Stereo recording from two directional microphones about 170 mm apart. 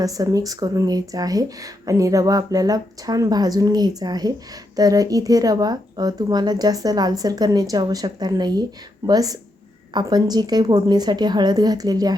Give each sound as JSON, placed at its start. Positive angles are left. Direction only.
{"t": 0.0, "sound": "speech", "side_deg": -20}